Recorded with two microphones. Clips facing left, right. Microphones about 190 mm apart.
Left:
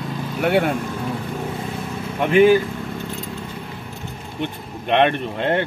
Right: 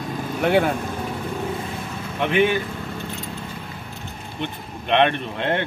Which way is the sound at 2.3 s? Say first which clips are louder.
Left 7 dB; 40° left (ahead or behind).